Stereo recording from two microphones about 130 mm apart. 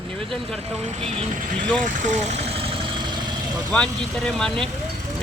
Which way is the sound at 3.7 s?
5° left (ahead or behind).